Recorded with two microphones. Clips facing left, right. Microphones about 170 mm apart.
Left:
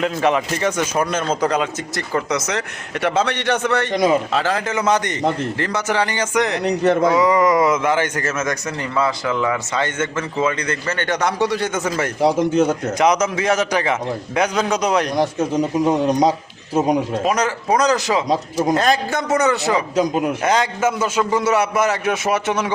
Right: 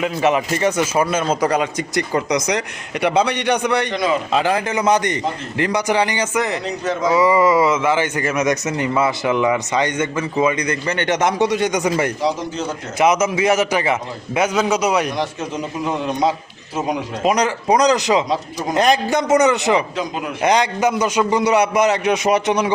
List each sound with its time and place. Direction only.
0.0 s a man's voice: 5° right (ahead or behind)
3.9 s speech: 45° left (ahead or behind)
4.3 s a man's voice: 15° right (ahead or behind)
6.7 s speech: 60° left (ahead or behind)
7.1 s a man's voice: 5° right (ahead or behind)
12.2 s speech: 55° left (ahead or behind)
13.0 s a man's voice: 5° right (ahead or behind)
17.2 s a man's voice: 15° right (ahead or behind)
20.0 s speech: 40° left (ahead or behind)
20.4 s a man's voice: 15° right (ahead or behind)